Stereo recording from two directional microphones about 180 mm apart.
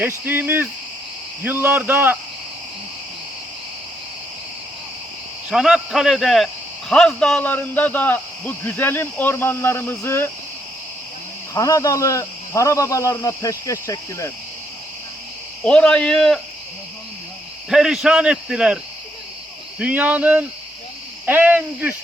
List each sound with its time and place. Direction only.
0.0 s speech: 10° right (ahead or behind)
5.5 s speech: centre (ahead or behind); by 10.2 s 15° left (ahead or behind)
11.5 s speech: 20° left (ahead or behind)
15.6 s speech: 5° left (ahead or behind)
17.7 s speech: 5° right (ahead or behind)
19.8 s speech: 10° right (ahead or behind)